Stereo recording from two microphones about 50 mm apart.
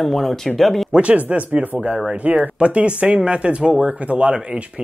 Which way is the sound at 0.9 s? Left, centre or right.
Right.